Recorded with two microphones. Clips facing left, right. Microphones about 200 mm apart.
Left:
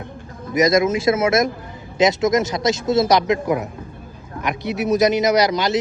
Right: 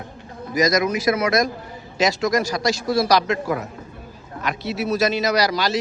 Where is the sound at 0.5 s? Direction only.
25° left (ahead or behind).